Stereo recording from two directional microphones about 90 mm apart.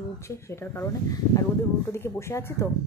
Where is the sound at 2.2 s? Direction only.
30° left (ahead or behind).